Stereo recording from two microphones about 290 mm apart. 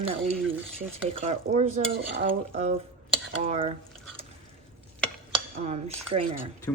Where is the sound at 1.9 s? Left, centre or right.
Right.